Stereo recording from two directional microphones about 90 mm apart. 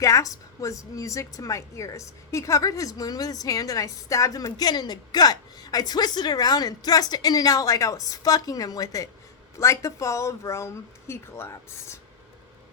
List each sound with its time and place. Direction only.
0.0 s a woman's voice: 40° left (ahead or behind)